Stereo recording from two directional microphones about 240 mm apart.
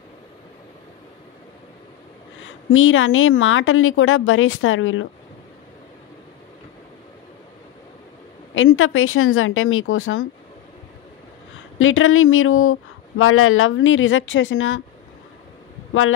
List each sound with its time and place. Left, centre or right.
2.4 s a woman's voice: left
8.5 s a woman's voice: left
11.8 s a woman's voice: left